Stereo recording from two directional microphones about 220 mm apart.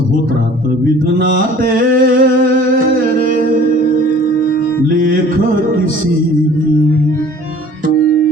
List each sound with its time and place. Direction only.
1.2 s music: 40° right (ahead or behind)